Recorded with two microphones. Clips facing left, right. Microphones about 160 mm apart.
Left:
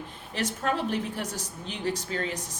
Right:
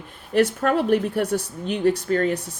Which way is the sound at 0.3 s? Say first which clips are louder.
Right 10 dB; 60° right (ahead or behind).